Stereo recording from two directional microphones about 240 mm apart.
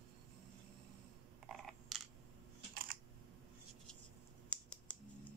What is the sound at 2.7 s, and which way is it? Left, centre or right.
Camera, right.